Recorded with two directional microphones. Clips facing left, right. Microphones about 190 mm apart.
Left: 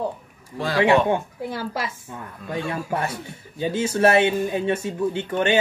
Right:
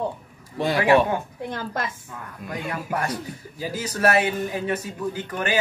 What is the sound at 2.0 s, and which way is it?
Speech, 25° left (ahead or behind).